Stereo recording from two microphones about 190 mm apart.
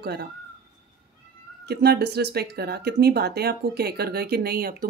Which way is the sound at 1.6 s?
60° right (ahead or behind).